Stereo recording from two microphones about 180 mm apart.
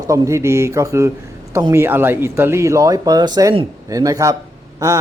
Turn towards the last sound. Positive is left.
turn(degrees=-20)  # may be behind; listen again after turning